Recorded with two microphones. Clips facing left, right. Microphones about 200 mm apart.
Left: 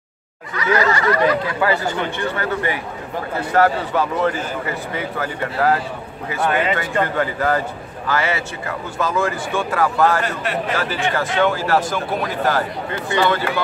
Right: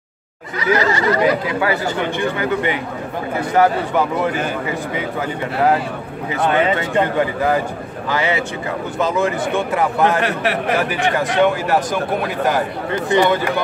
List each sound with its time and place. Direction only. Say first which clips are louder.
0.7 s speech: even; 25° right (ahead or behind)
1.6 s a man's voice: right 1 dB; 15° right (ahead or behind)
10.2 s a man's voice: right 4 dB; 65° right (ahead or behind)
10.8 s a man's voice: right 3 dB; 15° right (ahead or behind)